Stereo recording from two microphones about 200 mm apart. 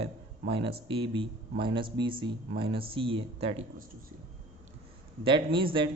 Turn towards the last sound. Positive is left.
turn(degrees=-25)  # may be behind; listen again after turning